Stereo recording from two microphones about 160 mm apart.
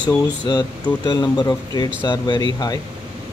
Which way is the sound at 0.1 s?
25° left (ahead or behind).